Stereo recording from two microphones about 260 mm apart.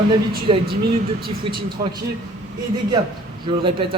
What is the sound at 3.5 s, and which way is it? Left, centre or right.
Speech, centre.